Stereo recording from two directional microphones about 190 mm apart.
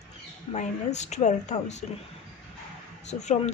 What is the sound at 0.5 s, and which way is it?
A woman's voice, 35° left (ahead or behind).